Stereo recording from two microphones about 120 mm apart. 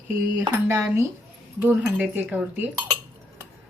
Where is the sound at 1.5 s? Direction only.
15° right (ahead or behind).